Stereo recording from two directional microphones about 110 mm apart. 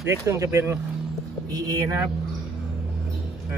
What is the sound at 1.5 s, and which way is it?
Speech, 30° right (ahead or behind).